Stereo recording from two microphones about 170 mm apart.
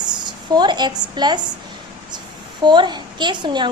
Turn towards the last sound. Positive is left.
turn(degrees=-25)  # may be behind; listen again after turning